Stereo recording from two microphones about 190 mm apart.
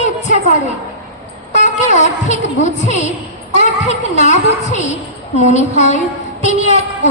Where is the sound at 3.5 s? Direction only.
40° left (ahead or behind).